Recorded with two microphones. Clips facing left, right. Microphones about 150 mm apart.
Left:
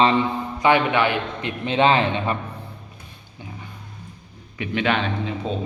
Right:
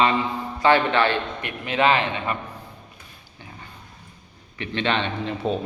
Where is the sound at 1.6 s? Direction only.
30° left (ahead or behind).